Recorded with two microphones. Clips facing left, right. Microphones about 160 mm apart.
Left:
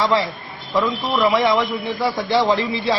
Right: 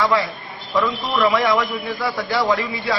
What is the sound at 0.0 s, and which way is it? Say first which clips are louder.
A man's voice: even; 30° left (ahead or behind).